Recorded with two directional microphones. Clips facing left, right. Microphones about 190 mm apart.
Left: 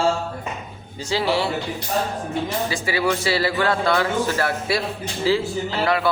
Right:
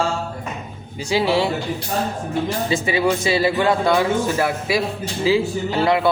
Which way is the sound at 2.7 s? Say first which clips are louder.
Right 6 dB; 20° right (ahead or behind).